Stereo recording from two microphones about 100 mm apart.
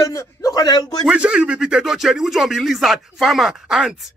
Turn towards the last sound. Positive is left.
turn(degrees=-5)  # may be behind; listen again after turning